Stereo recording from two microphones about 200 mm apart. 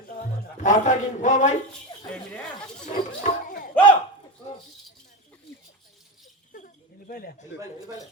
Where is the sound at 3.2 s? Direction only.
45° left (ahead or behind).